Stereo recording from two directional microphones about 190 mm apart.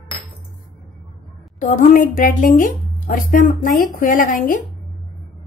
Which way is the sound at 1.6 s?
45° left (ahead or behind).